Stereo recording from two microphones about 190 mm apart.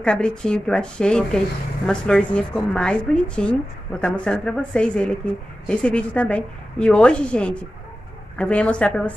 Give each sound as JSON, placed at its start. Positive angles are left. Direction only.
{"t": 0.0, "sound": "a woman's voice", "side_deg": 5}